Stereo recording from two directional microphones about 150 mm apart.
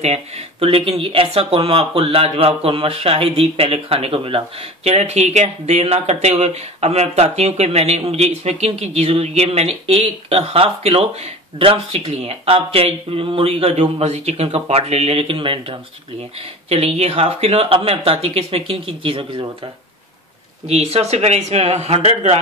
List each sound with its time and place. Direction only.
0.0 s speech: 45° right (ahead or behind)
20.6 s speech: 45° right (ahead or behind)